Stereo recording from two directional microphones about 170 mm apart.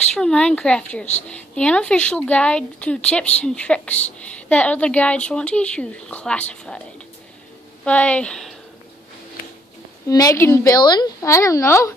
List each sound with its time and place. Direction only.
0.1 s speech: 5° left (ahead or behind)
7.8 s a woman's voice: 5° left (ahead or behind)
10.0 s speech: 20° left (ahead or behind)